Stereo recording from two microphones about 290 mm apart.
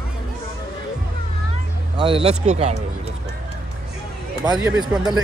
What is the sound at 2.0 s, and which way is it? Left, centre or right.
Speech, centre.